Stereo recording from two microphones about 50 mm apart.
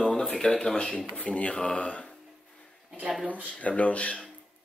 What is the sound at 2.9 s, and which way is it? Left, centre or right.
Speech, right.